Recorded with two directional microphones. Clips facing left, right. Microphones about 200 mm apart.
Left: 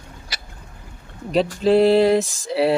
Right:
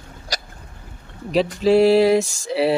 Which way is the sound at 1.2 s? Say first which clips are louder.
Even; 5° right (ahead or behind).